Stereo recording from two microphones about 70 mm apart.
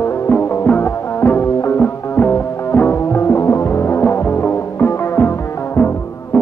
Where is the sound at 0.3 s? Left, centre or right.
Left.